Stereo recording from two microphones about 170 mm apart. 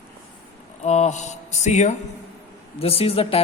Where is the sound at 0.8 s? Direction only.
40° left (ahead or behind).